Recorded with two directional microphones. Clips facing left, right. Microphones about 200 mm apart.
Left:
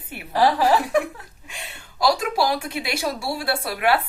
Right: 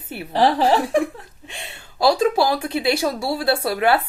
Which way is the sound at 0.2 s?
30° right (ahead or behind).